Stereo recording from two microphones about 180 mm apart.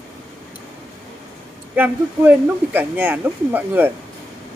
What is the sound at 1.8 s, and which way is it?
Speech, 10° right (ahead or behind).